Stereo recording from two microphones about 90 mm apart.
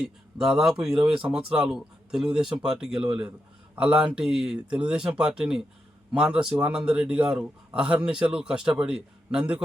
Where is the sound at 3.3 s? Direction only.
20° right (ahead or behind).